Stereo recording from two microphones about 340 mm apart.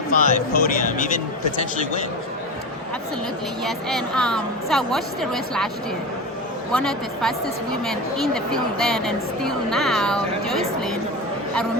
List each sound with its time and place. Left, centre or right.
0.2 s speech: left
3.6 s speech: centre
6.7 s speech: centre